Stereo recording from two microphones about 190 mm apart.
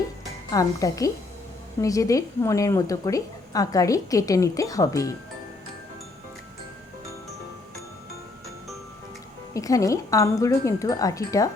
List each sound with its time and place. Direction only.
0.5 s a woman's voice: 20° left (ahead or behind)
9.6 s a woman's voice: 15° left (ahead or behind)